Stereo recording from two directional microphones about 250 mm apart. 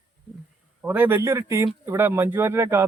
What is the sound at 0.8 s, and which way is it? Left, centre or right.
A man's voice, centre.